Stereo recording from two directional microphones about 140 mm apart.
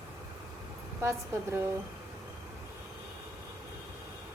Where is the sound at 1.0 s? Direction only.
20° right (ahead or behind).